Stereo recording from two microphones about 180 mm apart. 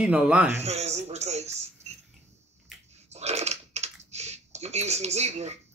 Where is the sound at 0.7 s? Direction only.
40° right (ahead or behind).